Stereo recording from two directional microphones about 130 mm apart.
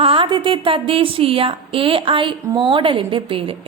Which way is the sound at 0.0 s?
40° right (ahead or behind).